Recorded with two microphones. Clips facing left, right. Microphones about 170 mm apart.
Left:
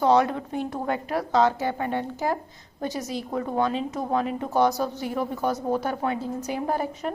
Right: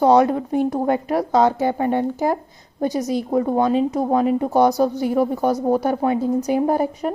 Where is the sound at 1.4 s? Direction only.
20° right (ahead or behind).